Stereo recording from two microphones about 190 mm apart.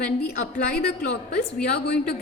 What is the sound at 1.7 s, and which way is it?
Speech, 60° left (ahead or behind).